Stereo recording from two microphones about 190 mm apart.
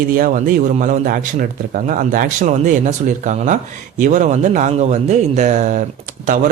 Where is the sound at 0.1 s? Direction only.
45° right (ahead or behind).